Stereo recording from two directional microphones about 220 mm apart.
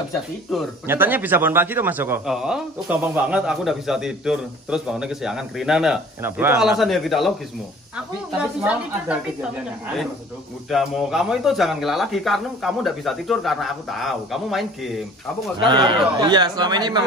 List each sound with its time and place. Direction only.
0.8 s a man's voice: 10° right (ahead or behind)
8.4 s a man's voice: 5° right (ahead or behind)
10.7 s a man's voice: centre (ahead or behind)
15.6 s a man's voice: 20° right (ahead or behind)